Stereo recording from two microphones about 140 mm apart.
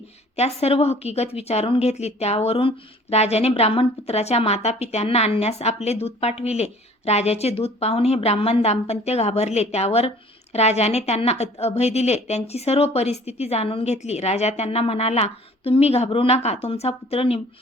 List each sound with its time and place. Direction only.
0.3 s a woman's voice: 50° left (ahead or behind)